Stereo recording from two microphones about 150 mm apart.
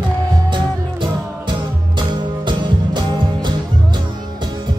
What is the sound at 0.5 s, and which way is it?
Music, 30° right (ahead or behind).